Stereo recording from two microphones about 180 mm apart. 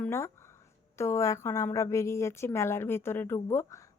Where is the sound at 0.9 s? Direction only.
15° left (ahead or behind).